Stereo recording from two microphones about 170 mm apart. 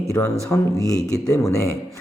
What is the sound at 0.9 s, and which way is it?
Speech, 5° left (ahead or behind).